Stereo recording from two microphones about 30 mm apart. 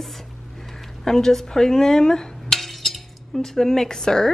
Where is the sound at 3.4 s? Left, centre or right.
Centre.